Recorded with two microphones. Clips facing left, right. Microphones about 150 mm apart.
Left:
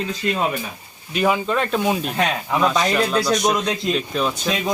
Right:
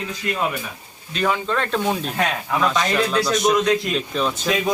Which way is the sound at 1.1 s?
10° left (ahead or behind).